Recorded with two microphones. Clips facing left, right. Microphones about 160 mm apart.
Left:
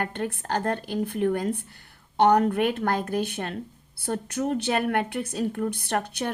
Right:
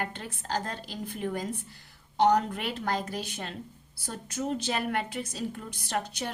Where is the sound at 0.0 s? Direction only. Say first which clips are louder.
Left 7 dB; 55° left (ahead or behind).